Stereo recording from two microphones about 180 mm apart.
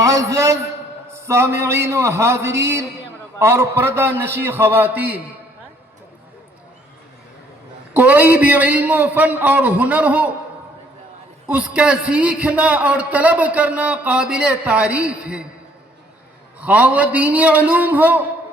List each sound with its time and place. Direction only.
0.0 s a man's voice: 20° right (ahead or behind)
7.9 s a man's voice: 10° right (ahead or behind)
11.4 s a man's voice: 5° right (ahead or behind)
16.6 s a man's voice: 5° right (ahead or behind)